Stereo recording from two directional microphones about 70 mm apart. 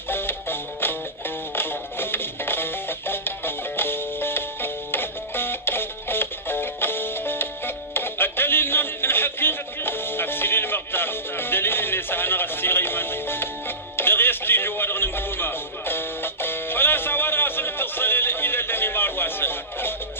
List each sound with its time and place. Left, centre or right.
0.1 s music: left